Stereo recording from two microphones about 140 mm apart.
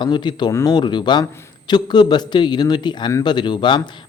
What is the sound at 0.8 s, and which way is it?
A man's voice, 35° left (ahead or behind).